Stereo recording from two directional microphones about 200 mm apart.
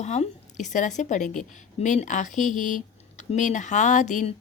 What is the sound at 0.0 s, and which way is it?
A woman's voice, 35° left (ahead or behind).